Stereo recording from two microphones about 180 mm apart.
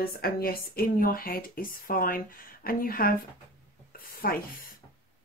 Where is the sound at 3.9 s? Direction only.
55° left (ahead or behind).